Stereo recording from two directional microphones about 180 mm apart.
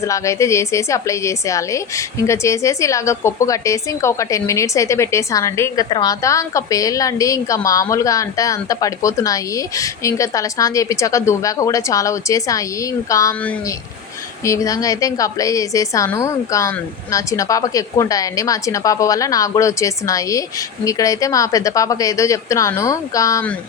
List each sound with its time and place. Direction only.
0.0 s a woman's voice: 15° left (ahead or behind)
14.4 s a woman's voice: 20° left (ahead or behind)